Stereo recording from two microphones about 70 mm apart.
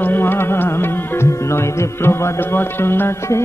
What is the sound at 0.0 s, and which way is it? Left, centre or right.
Music, left.